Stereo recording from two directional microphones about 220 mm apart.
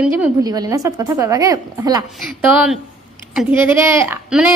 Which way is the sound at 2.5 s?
Centre (ahead or behind).